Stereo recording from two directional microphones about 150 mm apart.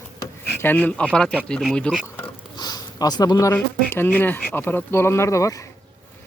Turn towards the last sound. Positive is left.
turn(degrees=20)  # may be behind; listen again after turning